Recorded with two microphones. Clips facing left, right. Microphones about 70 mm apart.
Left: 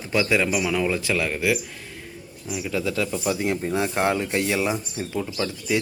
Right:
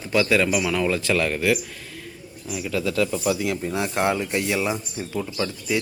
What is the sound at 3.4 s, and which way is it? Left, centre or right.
Speech, left.